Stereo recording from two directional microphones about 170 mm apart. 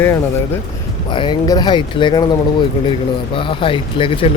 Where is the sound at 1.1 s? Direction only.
30° left (ahead or behind).